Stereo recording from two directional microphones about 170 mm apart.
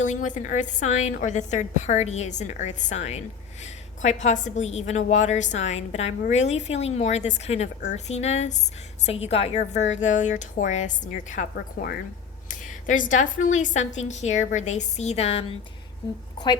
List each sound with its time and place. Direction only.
0.0 s a woman's voice: 45° left (ahead or behind)
12.9 s a woman's voice: 50° left (ahead or behind)